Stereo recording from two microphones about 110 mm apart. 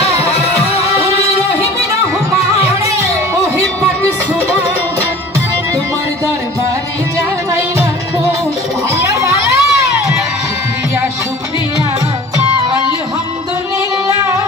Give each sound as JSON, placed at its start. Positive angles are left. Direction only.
{"t": 0.0, "sound": "music", "side_deg": 70}
{"t": 8.9, "sound": "children playing", "side_deg": -30}
{"t": 14.0, "sound": "music", "side_deg": -30}